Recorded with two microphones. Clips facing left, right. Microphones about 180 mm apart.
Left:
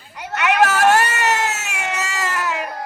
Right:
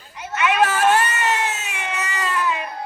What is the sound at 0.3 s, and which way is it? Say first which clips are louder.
Cat: left 2 dB; 75° left (ahead or behind).